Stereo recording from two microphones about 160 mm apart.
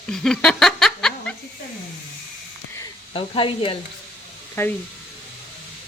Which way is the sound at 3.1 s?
35° left (ahead or behind).